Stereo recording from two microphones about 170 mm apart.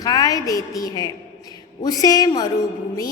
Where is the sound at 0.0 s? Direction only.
20° left (ahead or behind).